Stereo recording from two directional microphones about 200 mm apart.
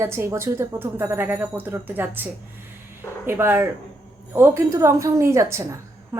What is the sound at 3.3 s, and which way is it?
A woman's voice, 10° right (ahead or behind).